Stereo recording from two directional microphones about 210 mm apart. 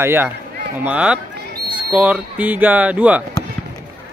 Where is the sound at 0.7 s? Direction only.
5° right (ahead or behind).